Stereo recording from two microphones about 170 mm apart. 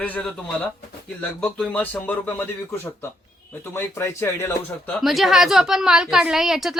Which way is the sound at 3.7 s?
15° left (ahead or behind).